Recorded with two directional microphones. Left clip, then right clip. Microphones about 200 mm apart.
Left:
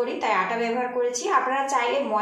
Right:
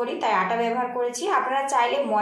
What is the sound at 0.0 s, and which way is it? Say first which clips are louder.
A woman's voice: right 1 dB; 20° right (ahead or behind).